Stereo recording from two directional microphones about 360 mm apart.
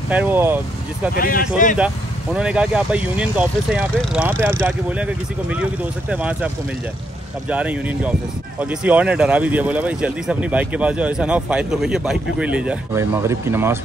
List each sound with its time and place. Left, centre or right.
0.1 s speech: centre
1.1 s speech: left
2.3 s speech: centre